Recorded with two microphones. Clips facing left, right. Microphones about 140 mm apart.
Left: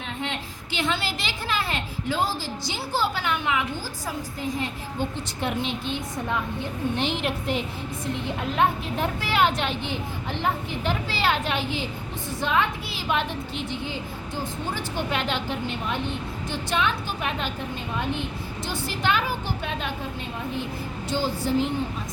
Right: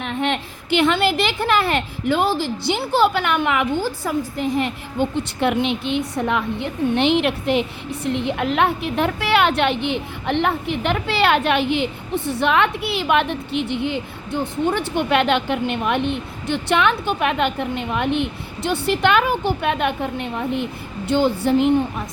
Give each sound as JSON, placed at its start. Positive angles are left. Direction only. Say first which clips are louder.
{"t": 0.0, "sound": "a woman's voice", "louder": "right 9 dB", "side_deg": -65}